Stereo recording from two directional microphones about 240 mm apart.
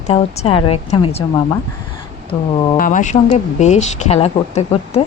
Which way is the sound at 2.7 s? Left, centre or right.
Left.